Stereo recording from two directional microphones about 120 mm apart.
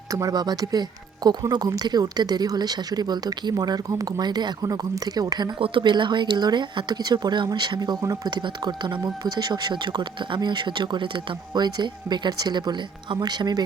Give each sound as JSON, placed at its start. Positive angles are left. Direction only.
{"t": 0.1, "sound": "speech", "side_deg": -30}